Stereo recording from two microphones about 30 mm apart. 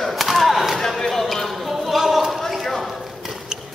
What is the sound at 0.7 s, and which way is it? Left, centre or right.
Basketball bounce, centre.